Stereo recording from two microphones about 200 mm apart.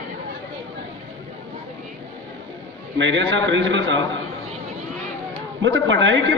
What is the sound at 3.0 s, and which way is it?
A man's voice, 65° right (ahead or behind).